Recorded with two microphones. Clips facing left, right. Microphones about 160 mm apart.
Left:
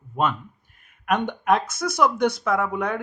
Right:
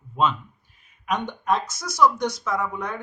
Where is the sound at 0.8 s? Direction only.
55° left (ahead or behind).